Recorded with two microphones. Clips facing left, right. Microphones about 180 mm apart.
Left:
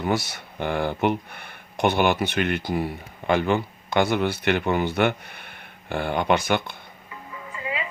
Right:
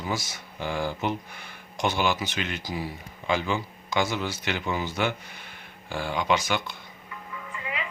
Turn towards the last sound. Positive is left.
turn(degrees=25)  # may be behind; listen again after turning